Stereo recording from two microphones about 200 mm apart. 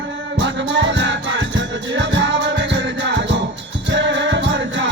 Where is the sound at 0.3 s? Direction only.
60° right (ahead or behind).